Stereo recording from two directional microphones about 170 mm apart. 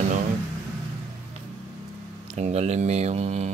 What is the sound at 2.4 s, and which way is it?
Speech, 40° right (ahead or behind).